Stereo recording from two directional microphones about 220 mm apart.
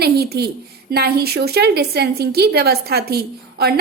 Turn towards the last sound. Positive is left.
turn(degrees=-45)  # may be behind; listen again after turning